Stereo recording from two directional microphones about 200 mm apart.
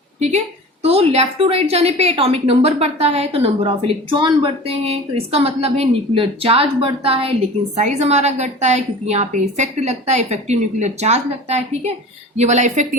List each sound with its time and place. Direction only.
0.2 s a woman's voice: 35° right (ahead or behind)